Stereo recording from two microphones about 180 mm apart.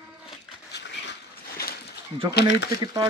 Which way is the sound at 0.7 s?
75° left (ahead or behind).